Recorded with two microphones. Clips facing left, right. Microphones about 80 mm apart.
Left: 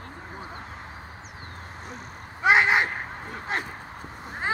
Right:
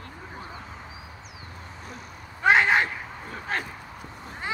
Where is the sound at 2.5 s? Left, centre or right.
Left.